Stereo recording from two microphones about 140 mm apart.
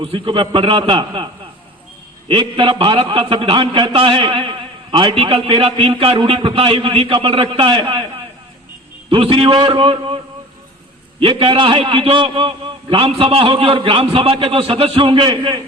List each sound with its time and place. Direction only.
0.0 s a man's voice: 40° right (ahead or behind)
9.0 s a man's voice: 40° right (ahead or behind)
11.2 s a man's voice: 40° right (ahead or behind)